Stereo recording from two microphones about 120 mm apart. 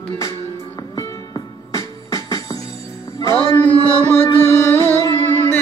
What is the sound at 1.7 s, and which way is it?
Music, 25° left (ahead or behind).